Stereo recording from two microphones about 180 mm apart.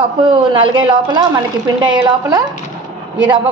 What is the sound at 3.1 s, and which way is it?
Speech, 25° right (ahead or behind).